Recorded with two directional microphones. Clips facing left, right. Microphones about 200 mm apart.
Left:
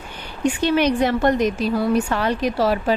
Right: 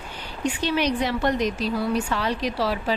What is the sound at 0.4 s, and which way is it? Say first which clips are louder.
A woman's voice: left 6 dB; 55° left (ahead or behind).